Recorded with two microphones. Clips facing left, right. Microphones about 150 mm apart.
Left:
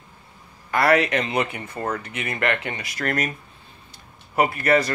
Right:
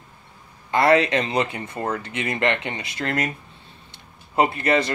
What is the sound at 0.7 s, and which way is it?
Speech, 25° right (ahead or behind).